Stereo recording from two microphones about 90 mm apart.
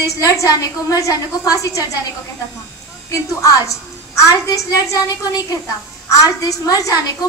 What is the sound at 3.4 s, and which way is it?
A woman's voice, 35° left (ahead or behind).